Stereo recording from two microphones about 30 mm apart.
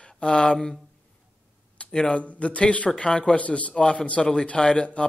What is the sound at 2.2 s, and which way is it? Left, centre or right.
Speech, left.